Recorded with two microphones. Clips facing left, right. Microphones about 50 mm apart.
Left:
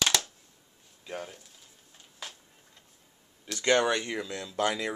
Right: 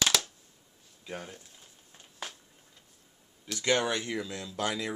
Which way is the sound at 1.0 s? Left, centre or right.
Centre.